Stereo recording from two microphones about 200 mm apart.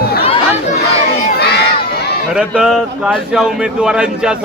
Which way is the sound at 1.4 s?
55° left (ahead or behind).